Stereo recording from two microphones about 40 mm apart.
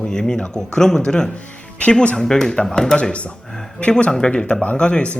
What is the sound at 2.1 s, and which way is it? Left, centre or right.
Speech, centre.